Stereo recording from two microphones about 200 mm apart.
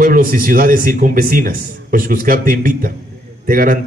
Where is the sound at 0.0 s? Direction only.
45° right (ahead or behind).